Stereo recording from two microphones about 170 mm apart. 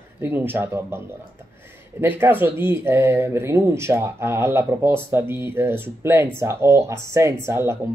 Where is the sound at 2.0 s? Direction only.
10° right (ahead or behind).